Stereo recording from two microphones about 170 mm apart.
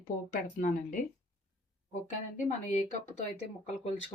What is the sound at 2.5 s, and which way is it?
Speech, 45° left (ahead or behind).